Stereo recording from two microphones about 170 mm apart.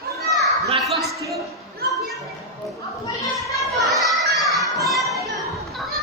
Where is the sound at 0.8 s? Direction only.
Centre (ahead or behind).